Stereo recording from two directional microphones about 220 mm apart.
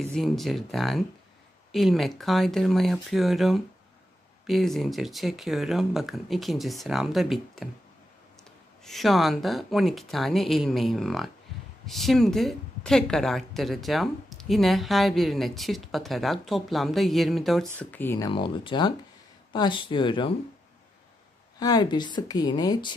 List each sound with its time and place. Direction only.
0.0 s speech: 5° left (ahead or behind)
8.8 s a woman's voice: centre (ahead or behind); by 20.3 s 20° left (ahead or behind)
21.5 s a woman's voice: 20° left (ahead or behind)